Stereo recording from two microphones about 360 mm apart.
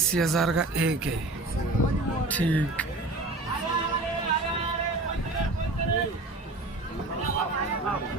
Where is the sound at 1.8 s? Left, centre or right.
Left.